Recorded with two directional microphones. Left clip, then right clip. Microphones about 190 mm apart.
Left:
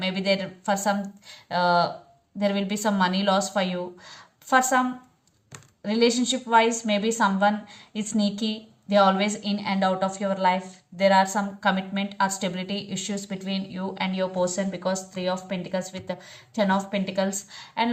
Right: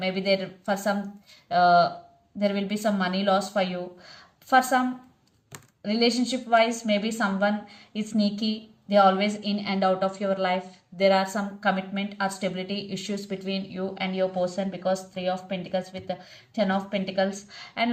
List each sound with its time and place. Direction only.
0.0 s a woman's voice: 25° left (ahead or behind)
5.8 s a woman's voice: 25° left (ahead or behind)